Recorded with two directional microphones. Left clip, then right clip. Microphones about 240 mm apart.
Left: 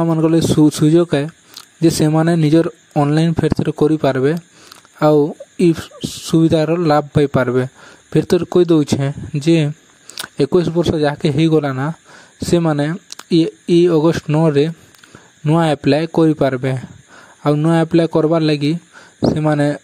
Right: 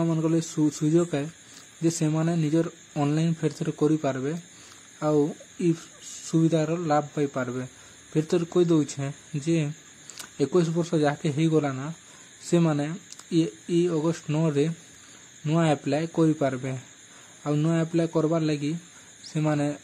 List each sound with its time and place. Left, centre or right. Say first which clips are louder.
0.0 s speech: left 11 dB; left